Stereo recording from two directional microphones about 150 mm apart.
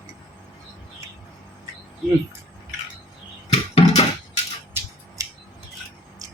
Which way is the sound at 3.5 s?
45° left (ahead or behind).